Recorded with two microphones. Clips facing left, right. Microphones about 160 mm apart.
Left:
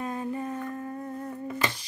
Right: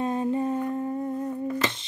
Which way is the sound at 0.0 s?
25° right (ahead or behind).